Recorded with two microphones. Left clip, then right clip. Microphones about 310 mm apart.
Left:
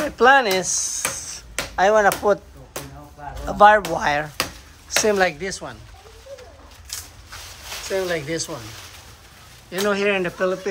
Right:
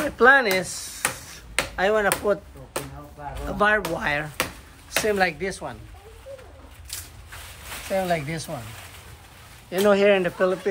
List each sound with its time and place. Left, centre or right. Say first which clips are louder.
0.0 s speech: left 2 dB; centre
3.4 s speech: left 8 dB; centre
3.8 s a sound: left 4 dB; centre
5.0 s speech: left 3 dB; centre
8.1 s speech: left 1 dB; centre
9.7 s speech: right 3 dB; centre